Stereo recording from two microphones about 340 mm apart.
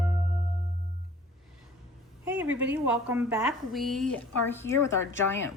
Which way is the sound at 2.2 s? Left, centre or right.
Centre.